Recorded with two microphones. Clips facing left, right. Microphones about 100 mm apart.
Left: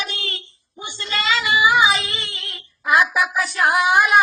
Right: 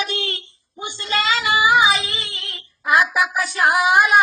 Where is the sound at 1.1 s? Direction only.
45° right (ahead or behind).